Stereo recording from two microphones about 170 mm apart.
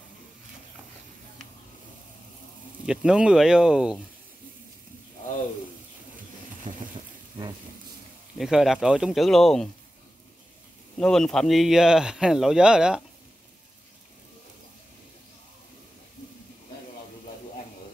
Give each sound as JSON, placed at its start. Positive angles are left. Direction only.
{"t": 2.8, "sound": "speech", "side_deg": -5}
{"t": 6.6, "sound": "a sound", "side_deg": -50}
{"t": 8.4, "sound": "speech", "side_deg": 0}
{"t": 11.0, "sound": "speech", "side_deg": 5}